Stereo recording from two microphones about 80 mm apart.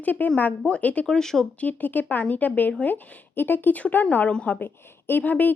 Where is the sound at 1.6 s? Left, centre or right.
Centre.